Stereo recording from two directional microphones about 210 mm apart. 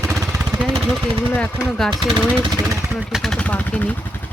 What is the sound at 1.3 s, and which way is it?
Speech, 5° left (ahead or behind).